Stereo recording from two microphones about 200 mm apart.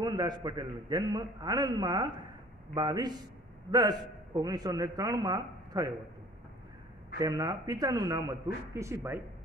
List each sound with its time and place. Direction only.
0.0 s a man's voice: 20° right (ahead or behind)
7.2 s a man's voice: 20° right (ahead or behind)